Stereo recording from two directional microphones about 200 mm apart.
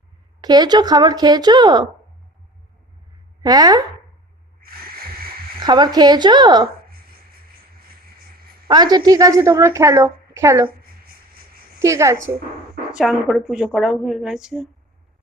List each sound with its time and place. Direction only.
0.4 s a woman's voice: 20° right (ahead or behind)
3.4 s a woman's voice: 20° right (ahead or behind)
5.5 s a woman's voice: 20° right (ahead or behind)
8.6 s a woman's voice: 20° right (ahead or behind)
10.7 s a sound: 50° right (ahead or behind)
11.8 s a woman's voice: 15° right (ahead or behind)
12.9 s a woman's voice: centre (ahead or behind)